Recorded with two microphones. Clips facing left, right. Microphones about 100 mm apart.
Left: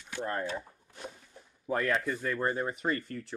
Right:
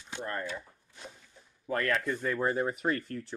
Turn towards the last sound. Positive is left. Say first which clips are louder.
# right 1 dB
turn(degrees=0)  # may be behind; listen again after turning